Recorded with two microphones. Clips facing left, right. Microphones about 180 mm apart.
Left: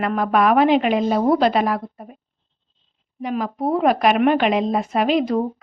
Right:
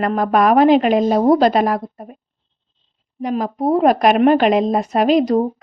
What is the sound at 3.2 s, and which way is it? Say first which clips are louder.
A woman's voice: right 4 dB; 40° right (ahead or behind).